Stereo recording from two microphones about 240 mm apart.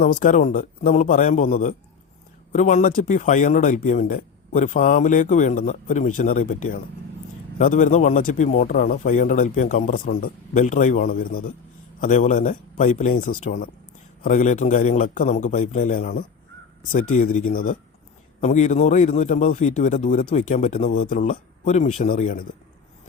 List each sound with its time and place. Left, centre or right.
0.0 s speech: left